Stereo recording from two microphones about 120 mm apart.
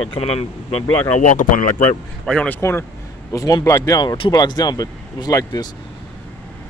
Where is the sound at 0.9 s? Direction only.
75° left (ahead or behind).